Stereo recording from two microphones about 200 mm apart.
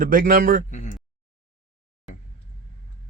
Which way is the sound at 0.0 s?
45° right (ahead or behind).